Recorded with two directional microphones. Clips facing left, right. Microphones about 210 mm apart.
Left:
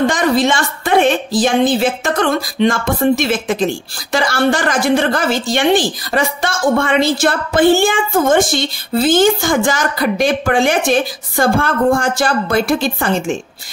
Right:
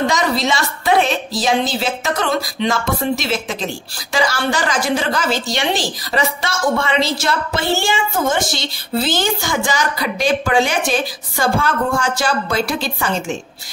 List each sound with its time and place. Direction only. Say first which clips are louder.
0.0 s a woman's voice: left 4 dB; 50° left (ahead or behind)